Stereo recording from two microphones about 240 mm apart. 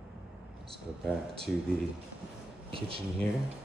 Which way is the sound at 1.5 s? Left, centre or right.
Centre.